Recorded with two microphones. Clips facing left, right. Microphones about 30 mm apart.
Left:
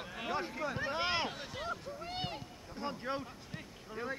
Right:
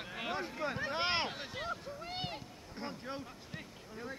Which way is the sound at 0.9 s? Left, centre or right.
Right.